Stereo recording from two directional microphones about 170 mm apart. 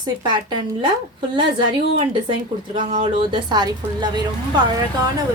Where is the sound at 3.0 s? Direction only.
25° right (ahead or behind).